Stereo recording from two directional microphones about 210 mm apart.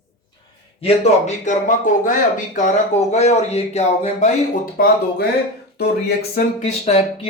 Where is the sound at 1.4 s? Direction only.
40° left (ahead or behind).